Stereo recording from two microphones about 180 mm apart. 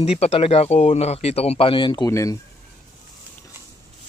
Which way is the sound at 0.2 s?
30° left (ahead or behind).